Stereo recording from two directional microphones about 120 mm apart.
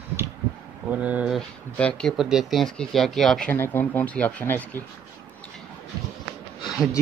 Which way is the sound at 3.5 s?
15° left (ahead or behind).